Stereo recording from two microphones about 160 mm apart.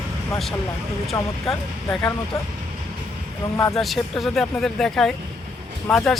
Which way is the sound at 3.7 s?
Centre (ahead or behind).